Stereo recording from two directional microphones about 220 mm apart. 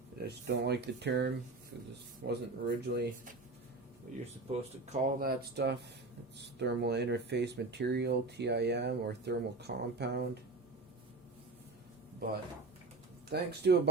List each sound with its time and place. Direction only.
0.2 s speech: 50° right (ahead or behind)
4.9 s speech: 45° right (ahead or behind)
13.3 s speech: 50° right (ahead or behind)